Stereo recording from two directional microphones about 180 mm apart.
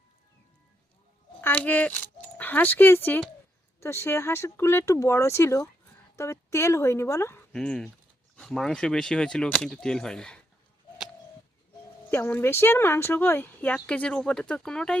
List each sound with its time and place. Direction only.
1.4 s keys jangling: 10° left (ahead or behind)
3.8 s speech: 15° left (ahead or behind)
7.5 s speech: 5° left (ahead or behind)
12.1 s speech: 15° left (ahead or behind)